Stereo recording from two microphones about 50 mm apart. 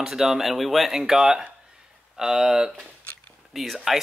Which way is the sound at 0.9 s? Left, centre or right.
Centre.